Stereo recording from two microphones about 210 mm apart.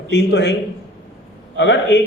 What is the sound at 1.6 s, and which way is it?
Speech, 55° left (ahead or behind).